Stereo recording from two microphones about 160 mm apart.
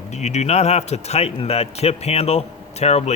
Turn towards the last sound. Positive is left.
turn(degrees=40)  # may be behind; listen again after turning